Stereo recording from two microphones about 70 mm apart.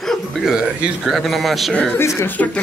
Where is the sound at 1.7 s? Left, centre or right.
Centre.